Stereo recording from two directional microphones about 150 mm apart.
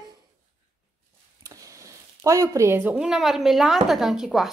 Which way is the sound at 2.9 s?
5° right (ahead or behind).